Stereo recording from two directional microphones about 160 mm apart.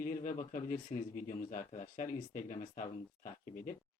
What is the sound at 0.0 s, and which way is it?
Speech, 55° left (ahead or behind).